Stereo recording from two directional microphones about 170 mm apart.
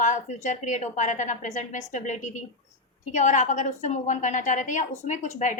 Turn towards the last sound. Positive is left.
turn(degrees=50)  # may be behind; listen again after turning